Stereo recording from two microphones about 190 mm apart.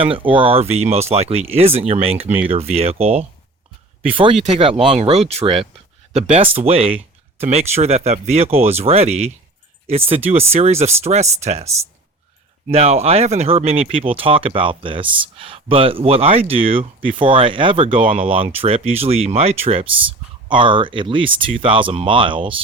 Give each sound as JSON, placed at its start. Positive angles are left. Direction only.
{"t": 0.0, "sound": "speech", "side_deg": -30}
{"t": 12.7, "sound": "speech", "side_deg": -35}